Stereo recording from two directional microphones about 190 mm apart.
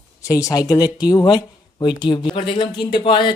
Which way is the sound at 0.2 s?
15° left (ahead or behind).